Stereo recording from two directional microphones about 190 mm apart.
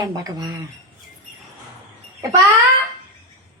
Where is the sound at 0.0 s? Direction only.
20° right (ahead or behind).